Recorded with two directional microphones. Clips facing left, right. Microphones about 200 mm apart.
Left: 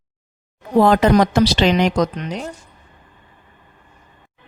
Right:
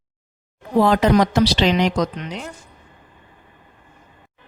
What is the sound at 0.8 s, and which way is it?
A woman's voice, 50° left (ahead or behind).